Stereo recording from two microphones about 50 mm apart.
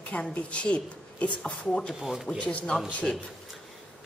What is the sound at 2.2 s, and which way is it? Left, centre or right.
Speech, left.